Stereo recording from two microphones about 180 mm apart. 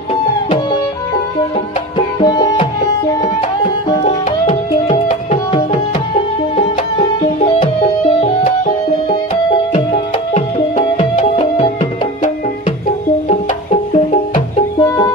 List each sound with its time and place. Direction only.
2.0 s music: 25° left (ahead or behind)
8.2 s music: 45° left (ahead or behind)
9.1 s music: 30° left (ahead or behind)
10.3 s music: 40° left (ahead or behind)
14.8 s music: 15° left (ahead or behind)